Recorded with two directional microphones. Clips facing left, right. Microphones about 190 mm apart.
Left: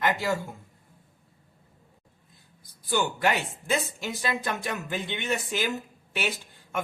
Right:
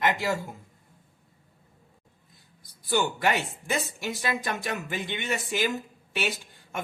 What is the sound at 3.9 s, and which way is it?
Speech, 15° right (ahead or behind).